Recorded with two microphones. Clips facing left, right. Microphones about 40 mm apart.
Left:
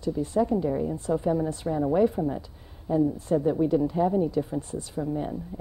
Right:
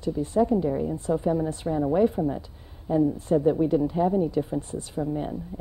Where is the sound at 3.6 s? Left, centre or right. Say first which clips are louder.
Right 1 dB; centre.